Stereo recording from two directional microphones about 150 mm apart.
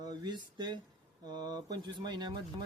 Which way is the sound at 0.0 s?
25° right (ahead or behind).